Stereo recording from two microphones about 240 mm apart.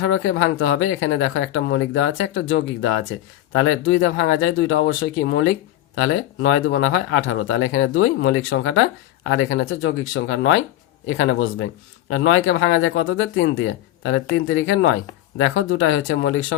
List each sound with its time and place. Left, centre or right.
0.0 s speech: left